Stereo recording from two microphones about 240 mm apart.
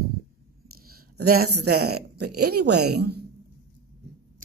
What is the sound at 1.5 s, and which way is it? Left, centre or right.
Speech, right.